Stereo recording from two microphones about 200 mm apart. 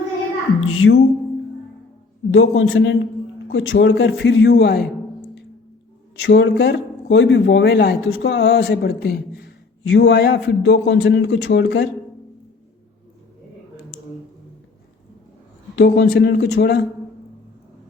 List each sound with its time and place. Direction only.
0.6 s speech: 90° left
2.3 s a man's voice: 70° left (ahead or behind)
3.5 s a man's voice: 85° left; by 4.9 s 55° left (ahead or behind)
6.2 s a man's voice: 60° left (ahead or behind)
15.7 s a man's voice: 60° left (ahead or behind)